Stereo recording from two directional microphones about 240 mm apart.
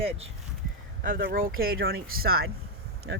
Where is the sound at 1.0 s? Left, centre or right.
Right.